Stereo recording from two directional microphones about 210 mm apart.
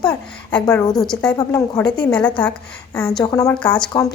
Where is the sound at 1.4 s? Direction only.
15° left (ahead or behind).